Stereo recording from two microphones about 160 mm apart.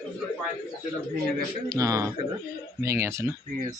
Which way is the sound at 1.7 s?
20° right (ahead or behind).